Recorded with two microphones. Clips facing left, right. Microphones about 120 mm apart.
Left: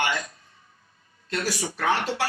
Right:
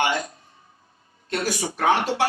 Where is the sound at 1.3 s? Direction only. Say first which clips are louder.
Right 3 dB; 25° right (ahead or behind).